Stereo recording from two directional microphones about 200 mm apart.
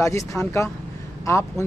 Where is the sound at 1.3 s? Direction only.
15° left (ahead or behind).